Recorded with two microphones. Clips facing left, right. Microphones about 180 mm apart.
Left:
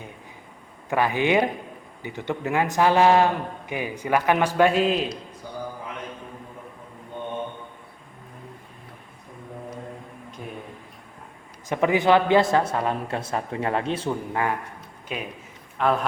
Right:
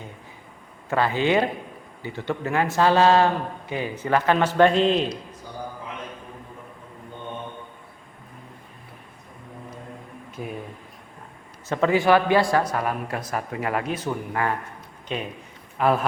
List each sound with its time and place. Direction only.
0.9 s a man's voice: 15° left (ahead or behind)
11.7 s speech: 15° left (ahead or behind)
15.0 s a man's voice: 5° left (ahead or behind)
15.8 s a man's voice: 5° right (ahead or behind)